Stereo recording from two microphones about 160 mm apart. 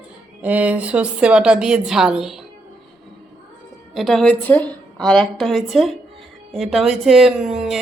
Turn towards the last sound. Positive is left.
turn(degrees=-5)  # may be behind; listen again after turning